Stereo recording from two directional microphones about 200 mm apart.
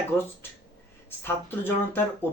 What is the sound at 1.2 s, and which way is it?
Speech, 10° left (ahead or behind).